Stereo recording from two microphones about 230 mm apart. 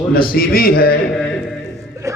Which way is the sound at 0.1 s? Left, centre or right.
Left.